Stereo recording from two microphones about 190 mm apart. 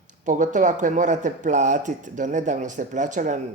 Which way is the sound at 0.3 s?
40° right (ahead or behind).